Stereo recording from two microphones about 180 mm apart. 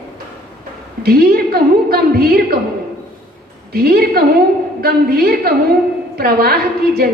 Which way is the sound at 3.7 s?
60° right (ahead or behind).